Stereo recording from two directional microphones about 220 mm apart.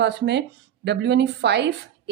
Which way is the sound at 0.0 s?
50° right (ahead or behind).